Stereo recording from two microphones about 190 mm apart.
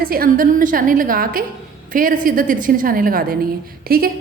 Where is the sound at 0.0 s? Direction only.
50° right (ahead or behind).